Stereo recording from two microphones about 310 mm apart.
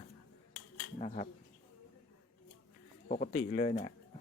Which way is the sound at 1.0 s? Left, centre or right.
Left.